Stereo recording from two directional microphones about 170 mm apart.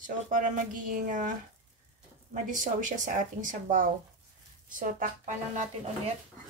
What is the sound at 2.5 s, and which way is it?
A woman's voice, 50° right (ahead or behind).